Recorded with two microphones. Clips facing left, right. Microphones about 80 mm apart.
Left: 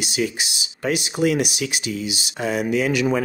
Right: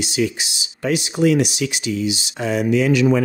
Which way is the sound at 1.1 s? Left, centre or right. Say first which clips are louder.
Right 5 dB; centre.